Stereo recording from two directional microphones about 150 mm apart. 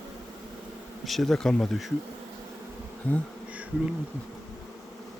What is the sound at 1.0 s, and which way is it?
Speech, centre (ahead or behind).